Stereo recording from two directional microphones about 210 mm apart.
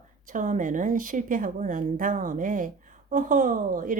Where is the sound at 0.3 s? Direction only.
40° right (ahead or behind).